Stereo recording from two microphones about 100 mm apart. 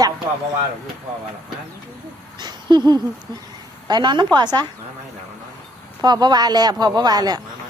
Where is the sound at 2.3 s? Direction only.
45° right (ahead or behind).